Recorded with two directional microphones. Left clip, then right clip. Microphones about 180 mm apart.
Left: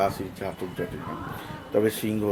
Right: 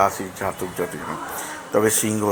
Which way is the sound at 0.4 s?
10° left (ahead or behind).